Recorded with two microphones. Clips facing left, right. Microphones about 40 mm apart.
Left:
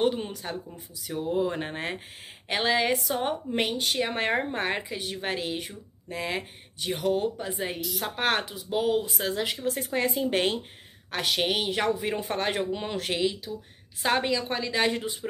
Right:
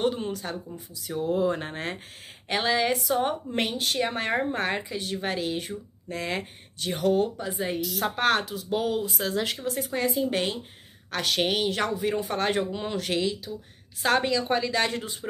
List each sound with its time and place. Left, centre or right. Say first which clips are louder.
0.0 s speech: even; centre
3.2 s speech: right 1 dB; centre
8.2 s speech: right 2 dB; centre
8.6 s speech: left 3 dB; centre
8.9 s speech: left 1 dB; left
9.3 s a woman's voice: left 2 dB; centre
11.3 s speech: right 2 dB; centre
11.6 s speech: right 1 dB; centre
14.7 s speech: left 1 dB; centre